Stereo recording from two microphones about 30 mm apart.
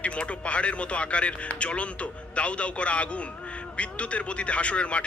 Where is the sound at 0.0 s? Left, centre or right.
Left.